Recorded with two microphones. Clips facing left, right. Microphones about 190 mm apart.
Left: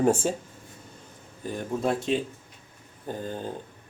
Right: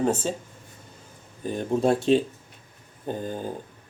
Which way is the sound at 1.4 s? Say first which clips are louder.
Right 4 dB; 20° right (ahead or behind).